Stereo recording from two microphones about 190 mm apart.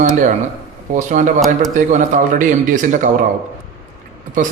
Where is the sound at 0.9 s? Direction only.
40° right (ahead or behind).